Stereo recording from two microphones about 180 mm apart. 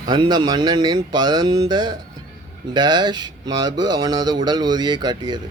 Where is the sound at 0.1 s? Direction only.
25° right (ahead or behind).